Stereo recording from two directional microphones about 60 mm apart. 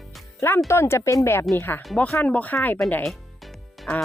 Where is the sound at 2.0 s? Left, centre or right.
Left.